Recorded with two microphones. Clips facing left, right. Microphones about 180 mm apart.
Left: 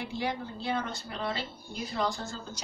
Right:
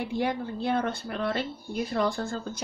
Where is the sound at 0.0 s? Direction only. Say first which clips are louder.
Right 5 dB; 55° right (ahead or behind).